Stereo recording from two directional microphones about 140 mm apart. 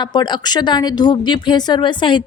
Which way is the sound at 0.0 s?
30° left (ahead or behind).